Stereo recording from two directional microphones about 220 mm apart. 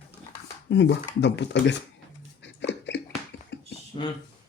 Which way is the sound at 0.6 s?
50° left (ahead or behind).